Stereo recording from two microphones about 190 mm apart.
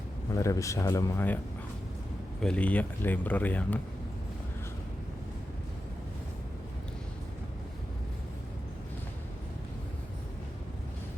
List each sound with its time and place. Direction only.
0.3 s speech: 15° left (ahead or behind)
2.4 s speech: 5° left (ahead or behind)